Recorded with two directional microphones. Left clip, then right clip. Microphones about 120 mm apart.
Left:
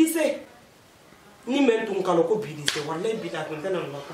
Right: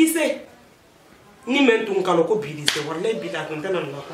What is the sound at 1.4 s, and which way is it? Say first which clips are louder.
Speech: right 4 dB; centre (ahead or behind).